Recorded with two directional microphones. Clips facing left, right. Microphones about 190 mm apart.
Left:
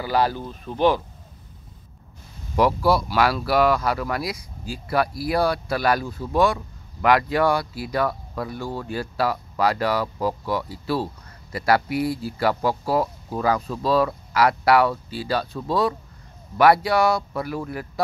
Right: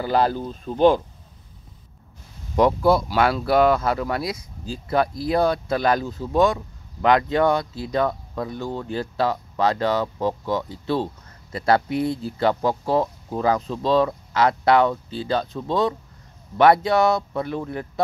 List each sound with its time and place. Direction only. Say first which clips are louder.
0.7 s speech: right 3 dB; 15° right (ahead or behind)
2.5 s speech: right 2 dB; 20° right (ahead or behind)